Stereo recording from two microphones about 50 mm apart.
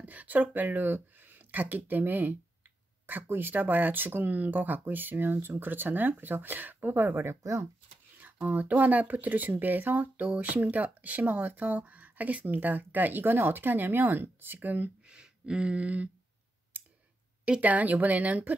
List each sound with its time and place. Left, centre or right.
0.0 s speech: right
7.2 s speech: right
8.2 s speech: right
15.0 s a sound: centre
17.6 s speech: right